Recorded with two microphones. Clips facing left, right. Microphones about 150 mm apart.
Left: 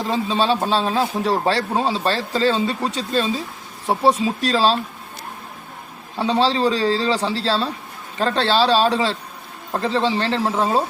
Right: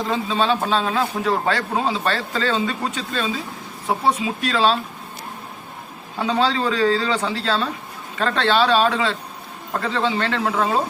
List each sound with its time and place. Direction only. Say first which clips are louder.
0.1 s a man's voice: left 2 dB; 30° left (ahead or behind)
6.1 s a man's voice: left 2 dB; 30° left (ahead or behind)